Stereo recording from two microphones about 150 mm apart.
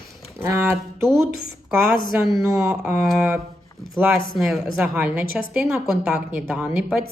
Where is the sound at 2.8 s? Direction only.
5° right (ahead or behind).